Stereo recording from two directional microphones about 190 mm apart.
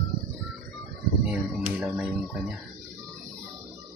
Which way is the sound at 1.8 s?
5° right (ahead or behind).